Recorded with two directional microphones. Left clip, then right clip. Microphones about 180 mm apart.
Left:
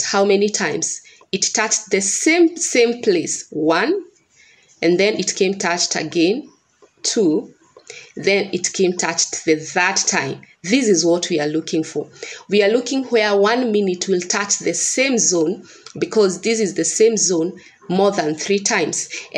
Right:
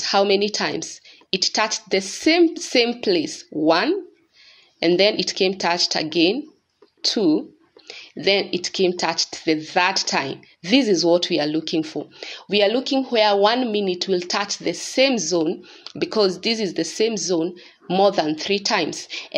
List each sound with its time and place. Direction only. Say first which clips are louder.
0.0 s speech: left 2 dB; 25° right (ahead or behind)